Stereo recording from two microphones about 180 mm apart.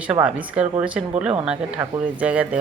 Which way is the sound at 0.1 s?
5° right (ahead or behind).